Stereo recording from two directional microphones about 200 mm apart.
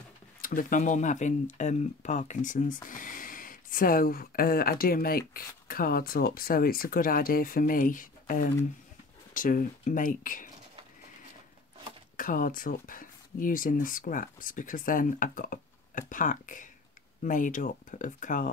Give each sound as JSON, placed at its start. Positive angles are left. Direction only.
{"t": 0.4, "sound": "speech", "side_deg": 45}
{"t": 12.2, "sound": "speech", "side_deg": 45}